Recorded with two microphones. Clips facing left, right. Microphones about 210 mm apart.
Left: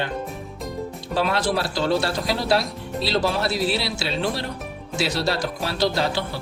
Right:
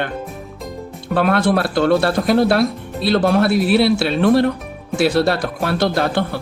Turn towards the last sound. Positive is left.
turn(degrees=-55)  # may be behind; listen again after turning